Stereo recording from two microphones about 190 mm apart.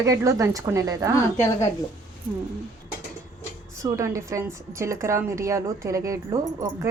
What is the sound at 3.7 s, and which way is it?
A woman's voice, 15° right (ahead or behind).